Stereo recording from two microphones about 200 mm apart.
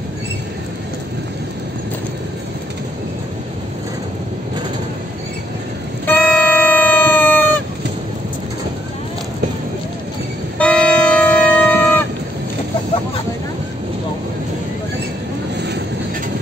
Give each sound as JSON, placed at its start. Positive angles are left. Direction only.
{"t": 6.0, "sound": "vehicle", "side_deg": 10}
{"t": 10.6, "sound": "music", "side_deg": 5}
{"t": 15.5, "sound": "vehicle", "side_deg": -55}